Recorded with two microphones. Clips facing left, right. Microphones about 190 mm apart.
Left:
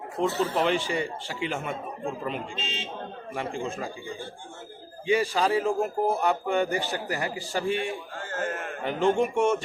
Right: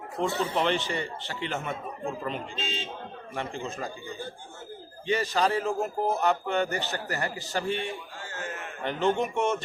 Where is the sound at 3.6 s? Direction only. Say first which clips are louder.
Left 2 dB; 10° left (ahead or behind).